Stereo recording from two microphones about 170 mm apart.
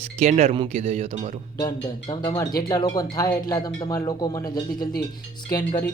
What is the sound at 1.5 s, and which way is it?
Speech, 25° left (ahead or behind).